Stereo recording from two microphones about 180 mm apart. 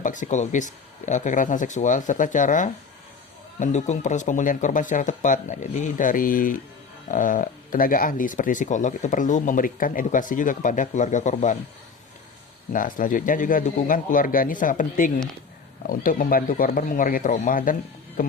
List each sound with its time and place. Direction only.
0.0 s speech: 45° left (ahead or behind)
12.7 s speech: 50° left (ahead or behind)
18.2 s music: 50° left (ahead or behind)